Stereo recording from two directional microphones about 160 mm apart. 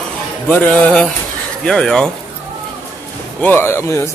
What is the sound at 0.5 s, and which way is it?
Speech, 10° left (ahead or behind).